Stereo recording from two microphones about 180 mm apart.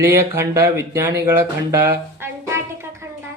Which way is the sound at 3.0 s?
15° right (ahead or behind).